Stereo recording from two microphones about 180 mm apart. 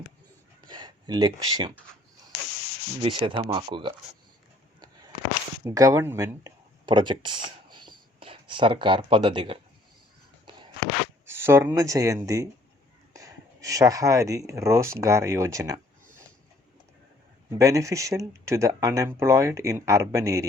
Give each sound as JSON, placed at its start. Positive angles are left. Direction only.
{"t": 0.7, "sound": "speech", "side_deg": -25}
{"t": 3.0, "sound": "speech", "side_deg": -30}
{"t": 5.6, "sound": "speech", "side_deg": -15}
{"t": 11.3, "sound": "speech", "side_deg": -15}
{"t": 17.6, "sound": "speech", "side_deg": -20}